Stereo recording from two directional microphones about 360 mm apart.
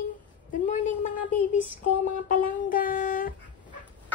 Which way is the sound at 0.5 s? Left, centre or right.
Left.